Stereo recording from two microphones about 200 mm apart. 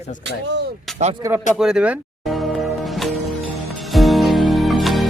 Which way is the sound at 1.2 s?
15° right (ahead or behind).